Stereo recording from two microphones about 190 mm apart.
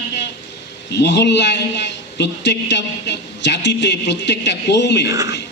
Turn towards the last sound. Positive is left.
turn(degrees=-15)  # may be behind; listen again after turning